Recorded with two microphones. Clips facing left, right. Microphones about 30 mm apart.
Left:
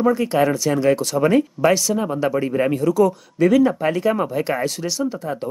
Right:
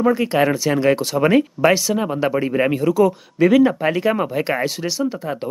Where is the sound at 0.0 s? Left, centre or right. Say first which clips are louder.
Right 1 dB; right.